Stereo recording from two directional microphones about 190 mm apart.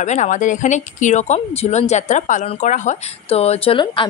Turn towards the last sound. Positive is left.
turn(degrees=25)  # may be behind; listen again after turning